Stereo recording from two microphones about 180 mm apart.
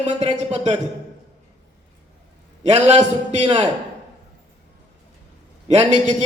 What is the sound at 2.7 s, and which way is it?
Speech, 40° right (ahead or behind).